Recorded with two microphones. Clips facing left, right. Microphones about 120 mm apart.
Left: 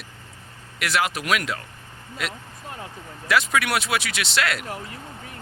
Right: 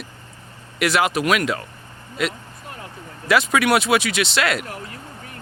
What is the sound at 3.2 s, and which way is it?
Speech, 10° right (ahead or behind).